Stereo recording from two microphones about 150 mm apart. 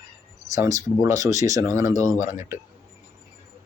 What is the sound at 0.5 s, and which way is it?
Speech, 20° right (ahead or behind).